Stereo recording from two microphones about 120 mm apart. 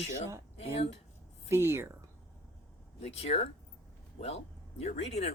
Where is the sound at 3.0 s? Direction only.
60° left (ahead or behind).